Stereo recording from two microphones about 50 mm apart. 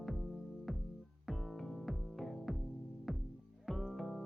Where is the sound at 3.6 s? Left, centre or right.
Centre.